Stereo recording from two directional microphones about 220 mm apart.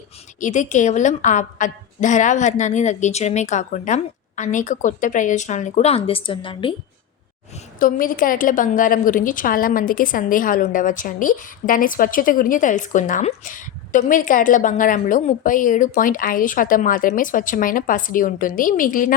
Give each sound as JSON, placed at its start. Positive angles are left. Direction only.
{"t": 0.3, "sound": "a woman's voice", "side_deg": 35}
{"t": 7.8, "sound": "a woman's voice", "side_deg": 40}